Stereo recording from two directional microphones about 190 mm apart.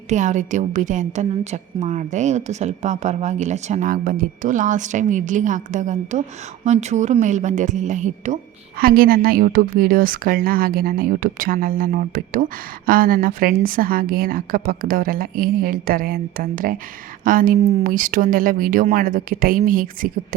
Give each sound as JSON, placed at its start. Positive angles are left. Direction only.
{"t": 0.1, "sound": "a woman's voice", "side_deg": -40}
{"t": 8.8, "sound": "a woman's voice", "side_deg": -50}